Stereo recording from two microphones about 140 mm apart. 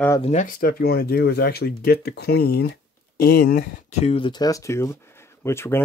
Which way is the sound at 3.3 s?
90° left.